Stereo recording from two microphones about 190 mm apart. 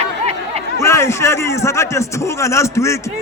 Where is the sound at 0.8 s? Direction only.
15° left (ahead or behind).